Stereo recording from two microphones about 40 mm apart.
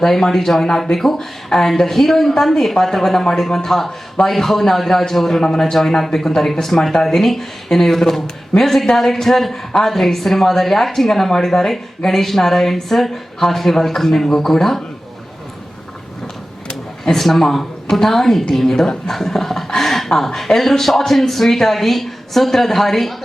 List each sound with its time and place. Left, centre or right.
0.0 s a woman's voice: centre
5.5 s speech: centre
17.1 s a woman's voice: centre